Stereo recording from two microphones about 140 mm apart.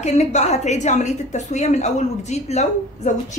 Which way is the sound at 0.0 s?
50° left (ahead or behind).